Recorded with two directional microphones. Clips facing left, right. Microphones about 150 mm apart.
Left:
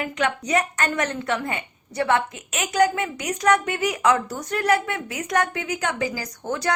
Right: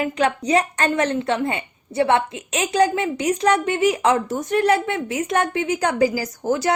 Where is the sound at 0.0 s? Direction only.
25° right (ahead or behind).